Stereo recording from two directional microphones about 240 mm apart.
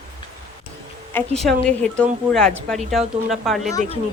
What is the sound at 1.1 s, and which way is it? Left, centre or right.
Speech, centre.